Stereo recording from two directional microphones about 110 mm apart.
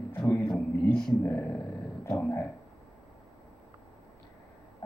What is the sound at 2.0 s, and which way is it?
Dog, 20° left (ahead or behind).